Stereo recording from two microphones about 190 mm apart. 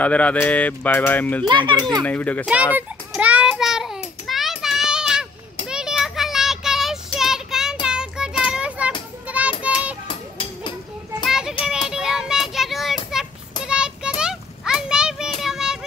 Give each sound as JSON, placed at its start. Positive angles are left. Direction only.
{"t": 0.0, "sound": "speech", "side_deg": 5}
{"t": 1.5, "sound": "a child's voice", "side_deg": -25}
{"t": 2.0, "sound": "speech", "side_deg": 10}
{"t": 2.4, "sound": "child singing", "side_deg": -5}
{"t": 10.0, "sound": "music", "side_deg": 25}
{"t": 11.2, "sound": "child singing", "side_deg": -5}
{"t": 13.7, "sound": "children playing", "side_deg": -5}